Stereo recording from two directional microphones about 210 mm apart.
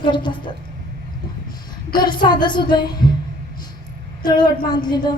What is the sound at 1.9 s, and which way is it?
Speech, 20° left (ahead or behind).